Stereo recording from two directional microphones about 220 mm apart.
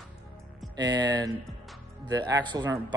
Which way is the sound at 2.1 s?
20° right (ahead or behind).